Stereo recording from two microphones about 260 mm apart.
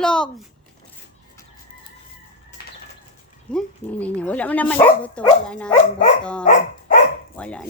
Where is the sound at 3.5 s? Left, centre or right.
Centre.